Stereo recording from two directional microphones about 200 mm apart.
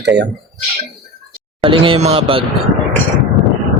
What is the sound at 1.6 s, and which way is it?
Speech, 25° right (ahead or behind).